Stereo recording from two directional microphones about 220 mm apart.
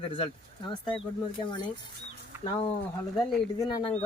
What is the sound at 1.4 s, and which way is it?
Speech, 20° left (ahead or behind).